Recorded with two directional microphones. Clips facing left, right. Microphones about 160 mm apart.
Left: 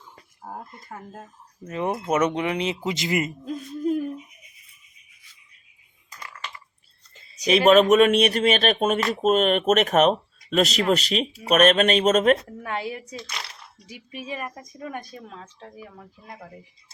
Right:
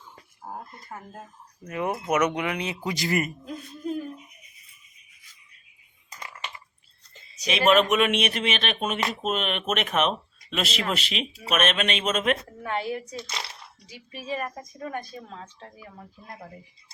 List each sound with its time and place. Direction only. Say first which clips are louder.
1.6 s speech: left 2 dB; 25° left (ahead or behind)
6.1 s typing: even; 20° right (ahead or behind)
7.4 s speech: left 5 dB; 40° left (ahead or behind)
12.6 s a woman's voice: right 2 dB; 10° left (ahead or behind)